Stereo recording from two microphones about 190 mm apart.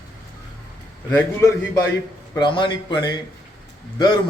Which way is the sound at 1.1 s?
15° left (ahead or behind).